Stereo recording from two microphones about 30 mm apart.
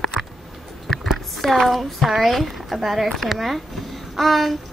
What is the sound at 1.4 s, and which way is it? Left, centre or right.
A woman's voice, centre.